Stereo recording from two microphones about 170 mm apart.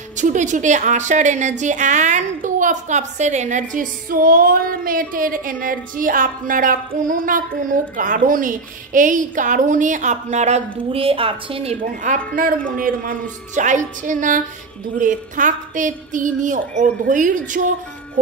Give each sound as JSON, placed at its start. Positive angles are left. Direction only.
{"t": 0.2, "sound": "a woman's voice", "side_deg": -45}
{"t": 12.1, "sound": "a woman's voice", "side_deg": -45}